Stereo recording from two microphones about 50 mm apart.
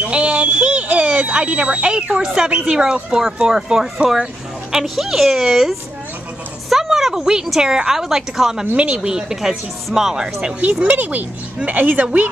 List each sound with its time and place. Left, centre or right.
0.0 s a woman's voice: right
8.7 s a woman's voice: right
10.6 s speech: right